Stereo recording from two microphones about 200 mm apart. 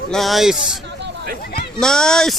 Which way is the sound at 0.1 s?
Centre (ahead or behind).